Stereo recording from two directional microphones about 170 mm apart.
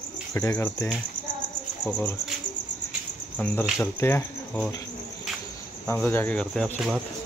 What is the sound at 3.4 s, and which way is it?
Speech, 10° left (ahead or behind).